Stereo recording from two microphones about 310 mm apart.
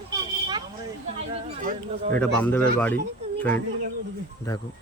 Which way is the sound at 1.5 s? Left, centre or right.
Right.